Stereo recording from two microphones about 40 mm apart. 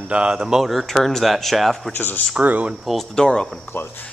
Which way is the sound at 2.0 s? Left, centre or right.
Left.